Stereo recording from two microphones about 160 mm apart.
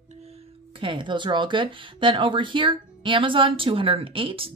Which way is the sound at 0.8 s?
30° right (ahead or behind).